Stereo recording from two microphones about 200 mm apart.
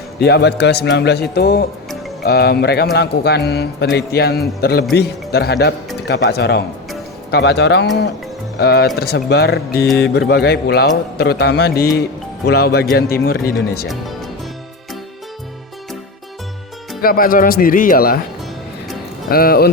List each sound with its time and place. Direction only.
0.2 s a man's voice: 55° left (ahead or behind)
17.0 s a man's voice: 45° left (ahead or behind)
19.3 s a man's voice: 50° left (ahead or behind)